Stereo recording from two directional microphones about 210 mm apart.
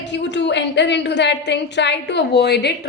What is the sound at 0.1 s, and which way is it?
A woman's voice, 55° left (ahead or behind).